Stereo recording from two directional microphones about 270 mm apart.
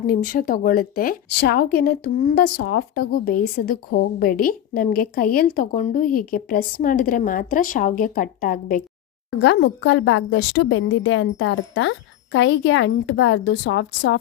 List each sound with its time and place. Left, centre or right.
0.1 s a woman's voice: left